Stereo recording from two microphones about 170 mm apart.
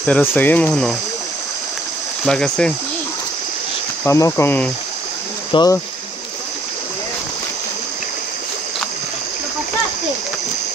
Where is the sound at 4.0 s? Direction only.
15° left (ahead or behind).